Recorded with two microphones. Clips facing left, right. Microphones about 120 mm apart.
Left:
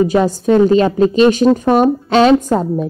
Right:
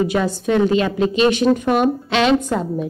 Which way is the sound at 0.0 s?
40° left (ahead or behind).